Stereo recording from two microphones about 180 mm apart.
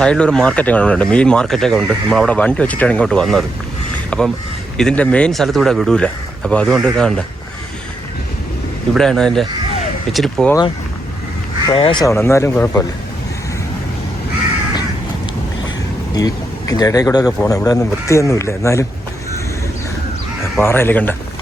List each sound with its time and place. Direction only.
0.0 s speech: 5° left (ahead or behind)
9.0 s speech: centre (ahead or behind)
11.7 s speech: 25° left (ahead or behind)
12.1 s speech: 15° left (ahead or behind)
16.1 s speech: 20° left (ahead or behind)
20.6 s speech: 10° left (ahead or behind)